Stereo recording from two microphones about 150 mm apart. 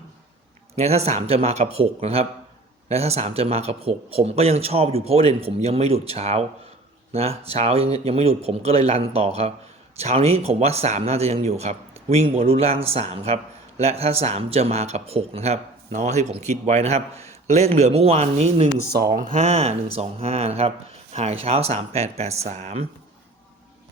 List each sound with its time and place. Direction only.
0.8 s speech: 45° right (ahead or behind)
18.9 s speech: 90° right; by 22.9 s 45° right (ahead or behind)